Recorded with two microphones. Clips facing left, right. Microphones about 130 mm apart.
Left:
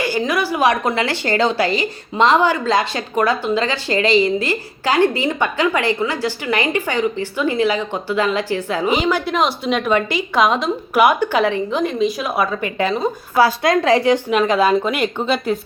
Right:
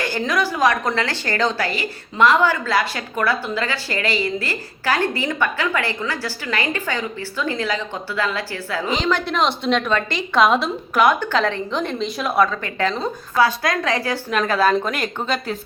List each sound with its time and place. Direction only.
0.0 s a woman's voice: 5° left (ahead or behind)
10.9 s a woman's voice: 10° left (ahead or behind)
12.5 s a woman's voice: 15° left (ahead or behind)
13.3 s speech: 25° left (ahead or behind); by 15.0 s 10° left (ahead or behind)